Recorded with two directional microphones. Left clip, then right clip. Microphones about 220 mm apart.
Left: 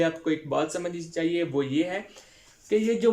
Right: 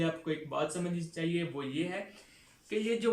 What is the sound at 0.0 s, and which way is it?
Speech, 40° left (ahead or behind).